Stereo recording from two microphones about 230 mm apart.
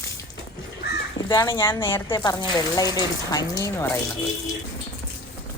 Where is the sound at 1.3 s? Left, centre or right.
Centre.